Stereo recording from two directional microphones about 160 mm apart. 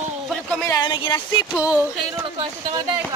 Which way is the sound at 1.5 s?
10° right (ahead or behind).